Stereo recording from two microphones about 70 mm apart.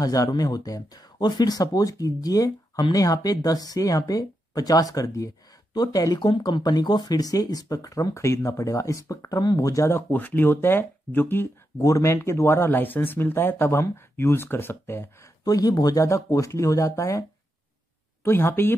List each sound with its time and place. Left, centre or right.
0.0 s speech: left
5.8 s speech: left
9.9 s speech: left
11.8 s speech: left
15.4 s speech: left
16.0 s speech: left
18.2 s speech: left